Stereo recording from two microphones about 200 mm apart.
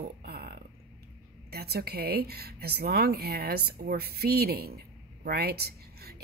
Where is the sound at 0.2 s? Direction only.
50° right (ahead or behind).